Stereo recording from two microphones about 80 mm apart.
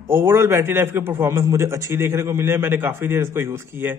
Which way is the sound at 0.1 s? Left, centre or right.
Right.